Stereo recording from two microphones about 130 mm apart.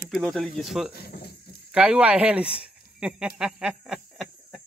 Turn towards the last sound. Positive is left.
turn(degrees=-5)  # may be behind; listen again after turning